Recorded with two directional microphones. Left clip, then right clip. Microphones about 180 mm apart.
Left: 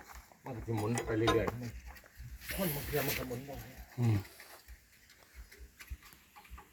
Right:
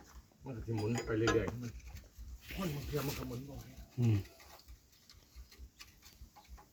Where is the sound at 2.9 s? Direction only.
35° right (ahead or behind).